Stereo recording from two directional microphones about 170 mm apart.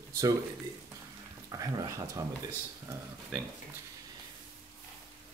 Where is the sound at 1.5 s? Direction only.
20° right (ahead or behind).